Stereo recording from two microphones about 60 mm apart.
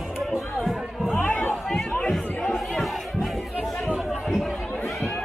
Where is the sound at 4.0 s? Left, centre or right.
Centre.